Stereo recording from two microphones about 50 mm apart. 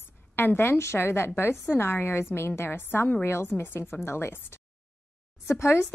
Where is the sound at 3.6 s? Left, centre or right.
Left.